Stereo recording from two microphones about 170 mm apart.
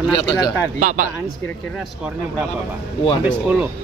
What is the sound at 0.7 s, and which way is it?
Speech, 50° right (ahead or behind).